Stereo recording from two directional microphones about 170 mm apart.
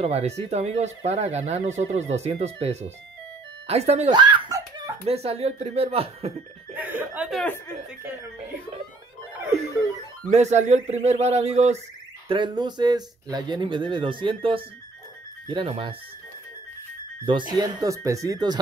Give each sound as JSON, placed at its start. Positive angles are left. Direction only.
{"t": 0.0, "sound": "speech", "side_deg": -40}
{"t": 4.1, "sound": "giggle", "side_deg": -25}
{"t": 5.0, "sound": "speech", "side_deg": -35}
{"t": 6.7, "sound": "speech", "side_deg": -10}
{"t": 10.3, "sound": "speech", "side_deg": -45}
{"t": 12.3, "sound": "speech", "side_deg": -25}
{"t": 17.3, "sound": "speech", "side_deg": -25}